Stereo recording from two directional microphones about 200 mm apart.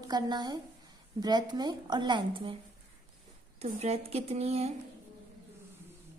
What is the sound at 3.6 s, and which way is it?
A woman's voice, 30° right (ahead or behind).